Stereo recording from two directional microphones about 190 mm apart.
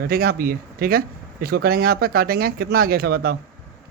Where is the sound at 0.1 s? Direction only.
50° right (ahead or behind).